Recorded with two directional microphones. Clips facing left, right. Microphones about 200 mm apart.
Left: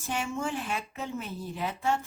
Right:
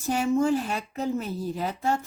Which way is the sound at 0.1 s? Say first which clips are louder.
Right 9 dB; 40° right (ahead or behind).